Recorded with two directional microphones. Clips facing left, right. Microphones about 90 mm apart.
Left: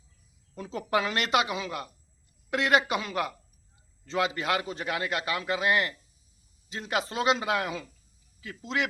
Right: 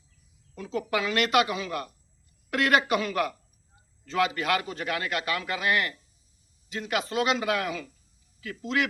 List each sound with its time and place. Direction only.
0.5 s a man's voice: 35° left (ahead or behind)